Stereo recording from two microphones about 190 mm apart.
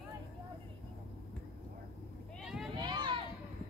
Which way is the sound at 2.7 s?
25° right (ahead or behind).